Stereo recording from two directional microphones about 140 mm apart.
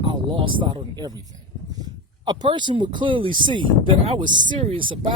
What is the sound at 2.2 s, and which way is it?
Speech, 30° right (ahead or behind).